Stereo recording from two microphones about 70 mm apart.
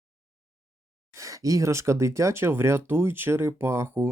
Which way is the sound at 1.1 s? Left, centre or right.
Right.